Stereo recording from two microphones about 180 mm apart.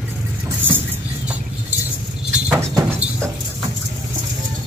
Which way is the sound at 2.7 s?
15° right (ahead or behind).